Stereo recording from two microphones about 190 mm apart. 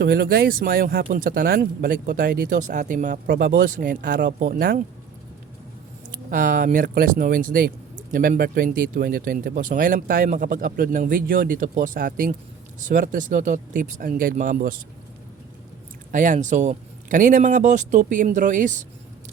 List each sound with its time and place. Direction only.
0.0 s speech: 55° right (ahead or behind)
3.2 s speech: 55° right (ahead or behind)
6.3 s speech: 45° right (ahead or behind)
16.1 s speech: 40° right (ahead or behind)